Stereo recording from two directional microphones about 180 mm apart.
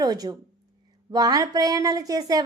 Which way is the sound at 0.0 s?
20° right (ahead or behind).